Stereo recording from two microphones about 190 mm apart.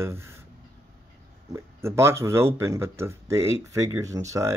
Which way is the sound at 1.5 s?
15° right (ahead or behind).